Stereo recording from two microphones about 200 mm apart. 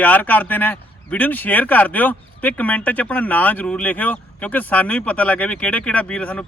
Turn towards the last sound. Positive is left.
turn(degrees=5)  # may be behind; listen again after turning